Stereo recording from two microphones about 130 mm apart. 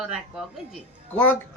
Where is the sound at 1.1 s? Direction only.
15° left (ahead or behind).